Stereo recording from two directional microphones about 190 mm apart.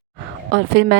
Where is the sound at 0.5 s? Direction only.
65° right (ahead or behind).